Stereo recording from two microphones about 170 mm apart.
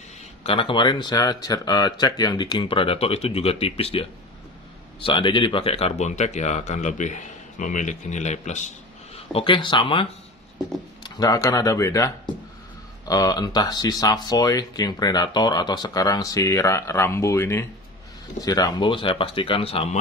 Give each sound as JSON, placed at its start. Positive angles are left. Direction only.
{"t": 0.4, "sound": "speech", "side_deg": 30}
{"t": 11.1, "sound": "speech", "side_deg": 20}
{"t": 13.1, "sound": "speech", "side_deg": 20}